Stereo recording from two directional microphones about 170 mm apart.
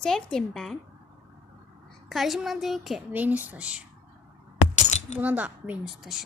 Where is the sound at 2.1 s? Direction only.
Centre (ahead or behind).